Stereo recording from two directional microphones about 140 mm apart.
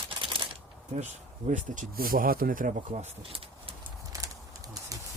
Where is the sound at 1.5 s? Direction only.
65° right (ahead or behind); by 2.7 s 85° right.